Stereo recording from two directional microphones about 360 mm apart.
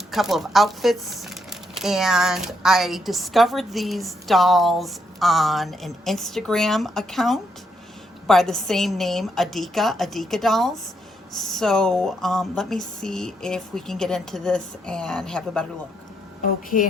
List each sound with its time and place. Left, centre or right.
0.1 s speech: centre
16.4 s a woman's voice: left